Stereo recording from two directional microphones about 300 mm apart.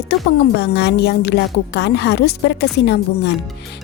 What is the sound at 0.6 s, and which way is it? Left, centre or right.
A woman's voice, left.